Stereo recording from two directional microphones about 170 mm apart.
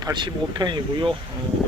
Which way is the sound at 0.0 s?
25° right (ahead or behind).